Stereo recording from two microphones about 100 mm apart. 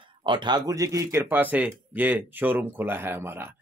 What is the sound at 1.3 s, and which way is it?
Speech, 20° right (ahead or behind).